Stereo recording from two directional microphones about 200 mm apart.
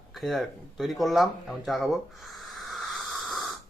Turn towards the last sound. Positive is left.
turn(degrees=0)  # may be behind; listen again after turning